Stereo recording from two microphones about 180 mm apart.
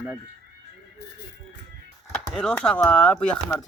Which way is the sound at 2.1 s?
5° left (ahead or behind).